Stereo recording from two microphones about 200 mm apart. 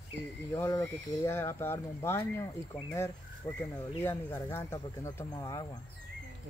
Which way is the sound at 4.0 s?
10° left (ahead or behind).